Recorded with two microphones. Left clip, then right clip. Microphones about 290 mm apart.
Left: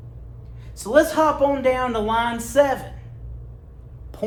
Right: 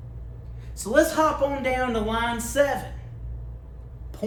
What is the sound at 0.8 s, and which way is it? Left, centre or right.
A woman's voice, left.